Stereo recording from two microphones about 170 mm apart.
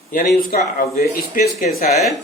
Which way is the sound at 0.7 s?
55° left (ahead or behind).